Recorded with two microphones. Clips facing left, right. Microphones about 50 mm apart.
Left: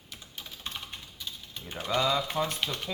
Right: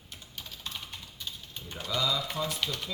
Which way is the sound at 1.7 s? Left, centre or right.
Left.